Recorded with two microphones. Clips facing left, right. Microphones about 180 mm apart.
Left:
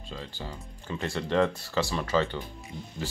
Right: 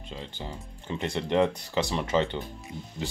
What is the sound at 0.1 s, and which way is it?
Speech, 20° right (ahead or behind).